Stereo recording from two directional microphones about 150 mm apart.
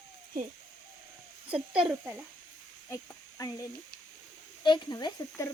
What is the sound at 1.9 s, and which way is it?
Speech, 10° right (ahead or behind).